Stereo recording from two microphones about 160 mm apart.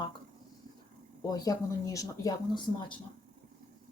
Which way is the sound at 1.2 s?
25° left (ahead or behind).